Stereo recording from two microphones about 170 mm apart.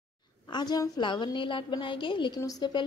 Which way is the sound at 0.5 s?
25° left (ahead or behind).